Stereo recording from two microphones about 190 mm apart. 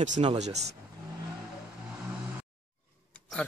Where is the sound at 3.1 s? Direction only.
5° left (ahead or behind).